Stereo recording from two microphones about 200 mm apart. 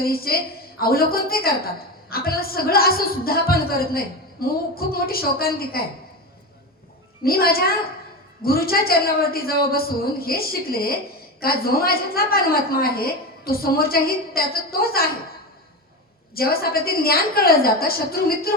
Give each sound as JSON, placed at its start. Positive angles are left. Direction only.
{"t": 0.0, "sound": "a woman's voice", "side_deg": 50}
{"t": 7.3, "sound": "a woman's voice", "side_deg": 50}
{"t": 16.3, "sound": "a woman's voice", "side_deg": 50}